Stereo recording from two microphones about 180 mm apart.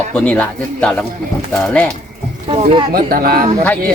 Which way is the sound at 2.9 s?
55° right (ahead or behind).